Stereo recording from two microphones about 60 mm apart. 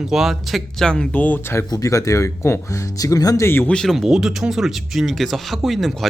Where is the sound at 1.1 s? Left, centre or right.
Left.